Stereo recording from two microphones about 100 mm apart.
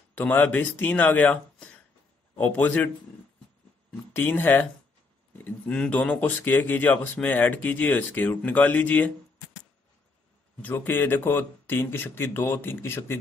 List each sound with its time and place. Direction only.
0.1 s speech: 15° left (ahead or behind)
4.1 s speech: 20° left (ahead or behind)
10.6 s speech: 20° left (ahead or behind)